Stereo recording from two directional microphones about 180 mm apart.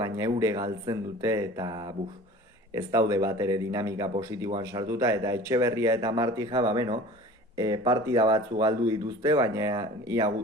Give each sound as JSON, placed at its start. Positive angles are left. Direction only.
{"t": 0.0, "sound": "speech", "side_deg": -20}